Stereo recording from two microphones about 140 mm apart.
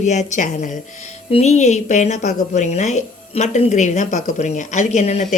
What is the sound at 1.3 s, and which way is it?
Speech, 50° left (ahead or behind).